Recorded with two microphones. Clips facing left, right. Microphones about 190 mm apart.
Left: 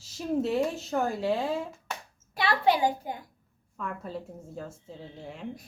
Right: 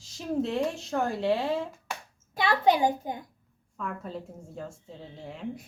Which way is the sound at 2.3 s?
20° right (ahead or behind).